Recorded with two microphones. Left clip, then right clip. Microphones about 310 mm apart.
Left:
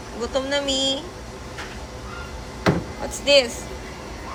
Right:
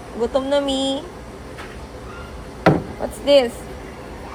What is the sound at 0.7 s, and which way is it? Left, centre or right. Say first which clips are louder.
Speech: even; centre.